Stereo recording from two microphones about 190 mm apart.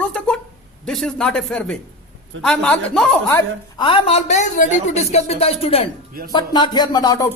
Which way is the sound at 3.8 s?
25° left (ahead or behind).